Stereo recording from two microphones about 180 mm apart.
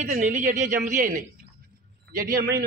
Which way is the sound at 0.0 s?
45° right (ahead or behind).